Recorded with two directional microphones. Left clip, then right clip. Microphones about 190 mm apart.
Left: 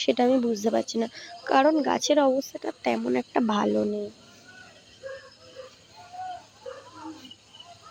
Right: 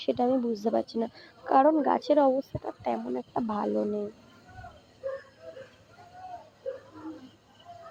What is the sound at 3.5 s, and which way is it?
Speech, 35° left (ahead or behind).